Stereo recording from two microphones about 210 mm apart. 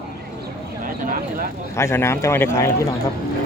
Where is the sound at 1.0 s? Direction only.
40° right (ahead or behind).